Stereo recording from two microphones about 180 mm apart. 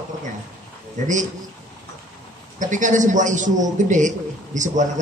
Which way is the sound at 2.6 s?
45° right (ahead or behind).